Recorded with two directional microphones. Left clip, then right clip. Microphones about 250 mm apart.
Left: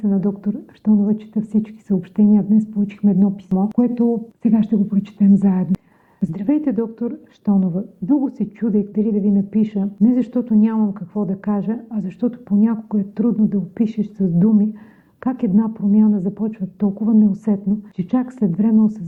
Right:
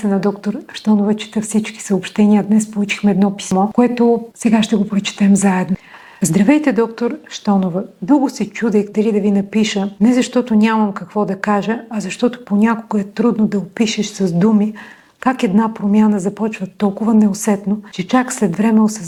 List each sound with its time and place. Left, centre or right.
0.0 s speech: centre
17.9 s speech: centre